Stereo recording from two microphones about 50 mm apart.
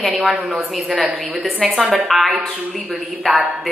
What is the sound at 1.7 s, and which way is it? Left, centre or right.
Speech, centre.